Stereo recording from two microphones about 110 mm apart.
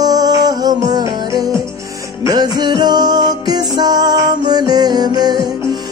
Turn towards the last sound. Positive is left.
turn(degrees=-40)  # may be behind; listen again after turning